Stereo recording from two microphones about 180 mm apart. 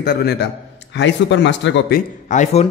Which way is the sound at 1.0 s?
80° left.